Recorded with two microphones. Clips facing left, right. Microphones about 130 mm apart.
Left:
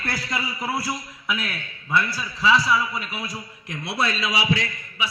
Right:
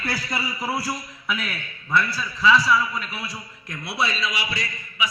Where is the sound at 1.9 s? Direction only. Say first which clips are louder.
Right 1 dB; 10° left (ahead or behind).